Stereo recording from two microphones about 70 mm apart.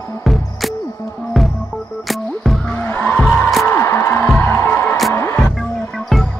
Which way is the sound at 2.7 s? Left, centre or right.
Centre.